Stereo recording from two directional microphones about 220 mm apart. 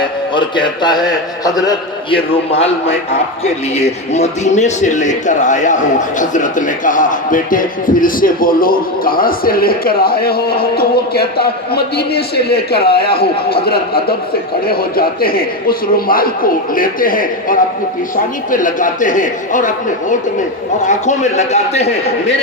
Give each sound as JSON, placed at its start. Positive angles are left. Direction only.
{"t": 0.3, "sound": "a man's voice", "side_deg": 20}